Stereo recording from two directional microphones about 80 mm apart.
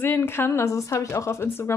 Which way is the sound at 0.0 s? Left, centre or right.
Left.